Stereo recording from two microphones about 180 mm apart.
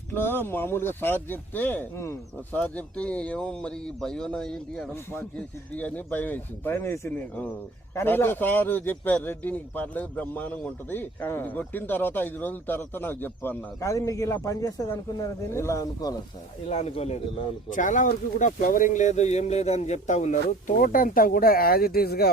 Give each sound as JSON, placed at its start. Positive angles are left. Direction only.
{"t": 0.1, "sound": "a man's voice", "side_deg": 10}
{"t": 16.6, "sound": "speech", "side_deg": 35}